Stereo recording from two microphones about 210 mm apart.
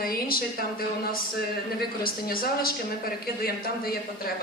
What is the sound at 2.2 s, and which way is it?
Speech, 45° left (ahead or behind).